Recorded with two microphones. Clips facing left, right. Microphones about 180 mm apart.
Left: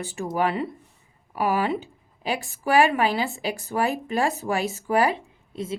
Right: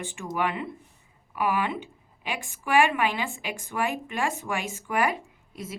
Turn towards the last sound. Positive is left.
turn(degrees=30)  # may be behind; listen again after turning